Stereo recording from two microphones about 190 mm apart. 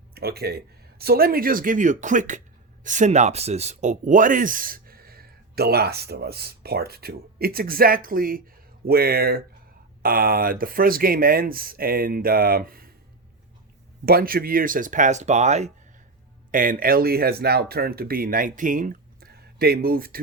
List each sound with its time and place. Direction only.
0.1 s speech: 55° right (ahead or behind)
14.0 s speech: 55° right (ahead or behind)